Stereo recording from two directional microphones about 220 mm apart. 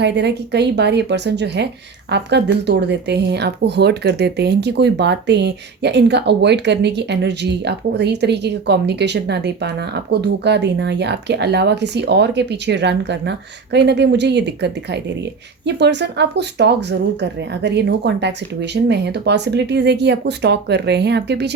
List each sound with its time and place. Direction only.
0.0 s speech: 50° right (ahead or behind)